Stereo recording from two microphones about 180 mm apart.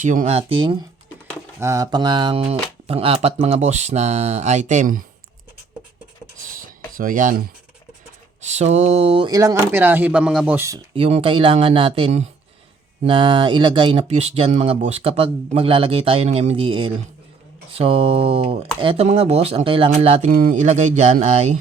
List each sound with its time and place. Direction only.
0.0 s speech: 45° right (ahead or behind); by 0.8 s 30° right (ahead or behind)
1.5 s speech: 15° right (ahead or behind); by 5.0 s 45° right (ahead or behind)
6.9 s speech: 50° right (ahead or behind); by 10.8 s 10° right (ahead or behind)
10.9 s speech: 30° right (ahead or behind)
20.3 s speech: 50° right (ahead or behind)